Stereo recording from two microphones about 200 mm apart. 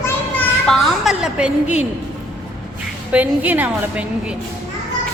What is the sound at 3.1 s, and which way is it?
A woman's voice, 5° right (ahead or behind).